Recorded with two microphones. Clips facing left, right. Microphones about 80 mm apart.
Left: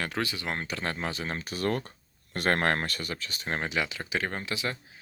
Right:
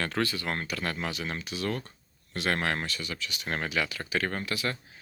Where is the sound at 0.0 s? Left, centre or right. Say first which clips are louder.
Right 2 dB; centre; by 3.5 s left.